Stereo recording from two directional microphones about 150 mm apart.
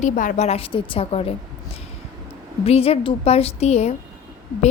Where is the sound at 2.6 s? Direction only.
40° left (ahead or behind).